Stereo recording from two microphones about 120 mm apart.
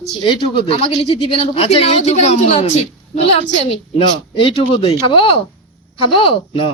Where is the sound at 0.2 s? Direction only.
45° left (ahead or behind).